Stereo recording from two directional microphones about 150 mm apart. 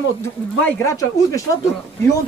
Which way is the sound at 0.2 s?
15° left (ahead or behind).